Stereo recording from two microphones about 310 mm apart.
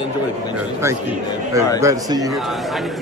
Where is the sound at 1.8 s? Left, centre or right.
Centre.